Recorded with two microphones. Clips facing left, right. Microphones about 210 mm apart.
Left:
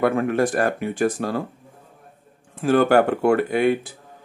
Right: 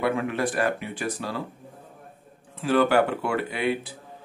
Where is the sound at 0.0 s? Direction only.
50° left (ahead or behind).